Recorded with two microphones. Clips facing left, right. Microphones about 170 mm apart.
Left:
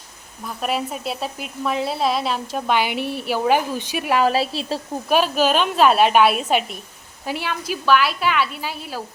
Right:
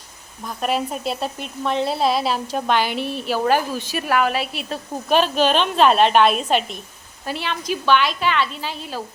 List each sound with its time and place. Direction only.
0.4 s speech: centre (ahead or behind)
2.7 s a woman's voice: 15° left (ahead or behind)
4.2 s a woman's voice: 35° left (ahead or behind)
5.0 s a woman's voice: 5° left (ahead or behind)